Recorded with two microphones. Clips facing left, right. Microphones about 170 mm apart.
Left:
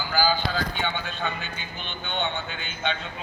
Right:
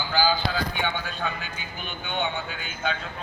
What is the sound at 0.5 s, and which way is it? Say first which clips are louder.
A man's voice: even; 10° right (ahead or behind).